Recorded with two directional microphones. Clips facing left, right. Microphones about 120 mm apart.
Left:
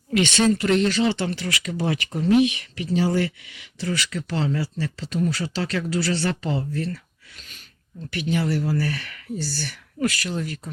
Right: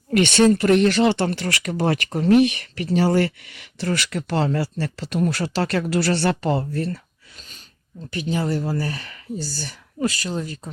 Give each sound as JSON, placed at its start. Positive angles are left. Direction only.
{"t": 0.1, "sound": "speech", "side_deg": -55}
{"t": 4.6, "sound": "speech", "side_deg": -65}
{"t": 6.6, "sound": "speech", "side_deg": -40}
{"t": 8.1, "sound": "speech", "side_deg": -30}
{"t": 8.4, "sound": "speech", "side_deg": -20}